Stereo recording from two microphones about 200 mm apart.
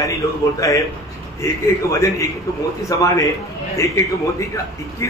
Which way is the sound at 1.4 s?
15° left (ahead or behind).